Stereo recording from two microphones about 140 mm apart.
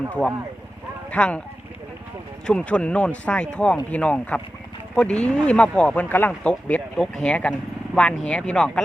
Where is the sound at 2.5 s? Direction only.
5° left (ahead or behind).